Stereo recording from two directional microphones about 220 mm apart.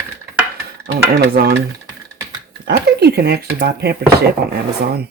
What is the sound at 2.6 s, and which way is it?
Speech, 45° right (ahead or behind).